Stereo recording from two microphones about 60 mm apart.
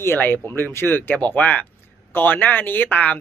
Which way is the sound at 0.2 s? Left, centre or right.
Left.